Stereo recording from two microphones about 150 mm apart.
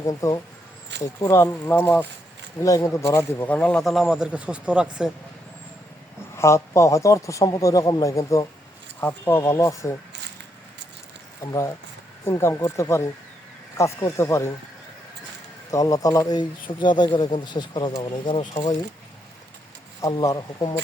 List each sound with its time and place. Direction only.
0.0 s a man's voice: 25° left (ahead or behind)
2.6 s speech: 20° left (ahead or behind); by 4.9 s 5° right (ahead or behind)
6.3 s a man's voice: 20° left (ahead or behind)
12.2 s a man's voice: 20° left (ahead or behind)
15.7 s a man's voice: 20° left (ahead or behind); by 18.7 s 40° left (ahead or behind)
20.0 s a man's voice: 25° left (ahead or behind)